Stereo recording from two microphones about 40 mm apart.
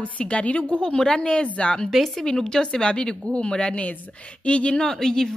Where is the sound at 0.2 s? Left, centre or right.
Left.